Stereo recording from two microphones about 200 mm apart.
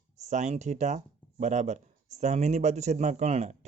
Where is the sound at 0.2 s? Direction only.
35° right (ahead or behind).